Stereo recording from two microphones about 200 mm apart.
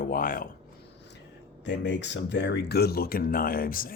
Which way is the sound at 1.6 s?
60° left (ahead or behind).